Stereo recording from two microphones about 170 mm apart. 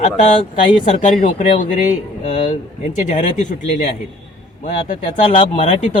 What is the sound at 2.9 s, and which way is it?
Speech, 45° left (ahead or behind).